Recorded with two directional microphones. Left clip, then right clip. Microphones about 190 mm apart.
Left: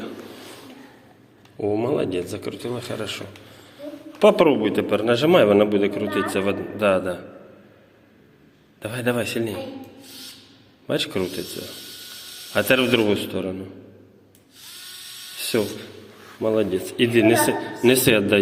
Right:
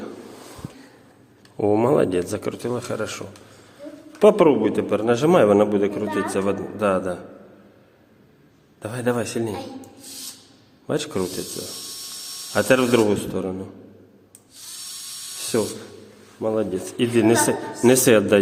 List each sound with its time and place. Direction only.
1.5 s speech: 45° right (ahead or behind)
4.3 s a man's voice: 20° right (ahead or behind)
8.8 s a man's voice: 25° right (ahead or behind)
10.8 s a man's voice: 20° right (ahead or behind)
12.5 s a man's voice: 20° right (ahead or behind)
15.5 s a man's voice: 15° right (ahead or behind)
16.8 s a man's voice: 20° right (ahead or behind)